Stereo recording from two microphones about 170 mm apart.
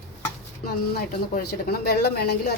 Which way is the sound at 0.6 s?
65° left (ahead or behind).